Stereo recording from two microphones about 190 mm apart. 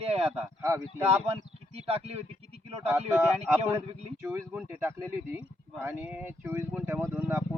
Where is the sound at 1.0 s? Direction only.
35° right (ahead or behind).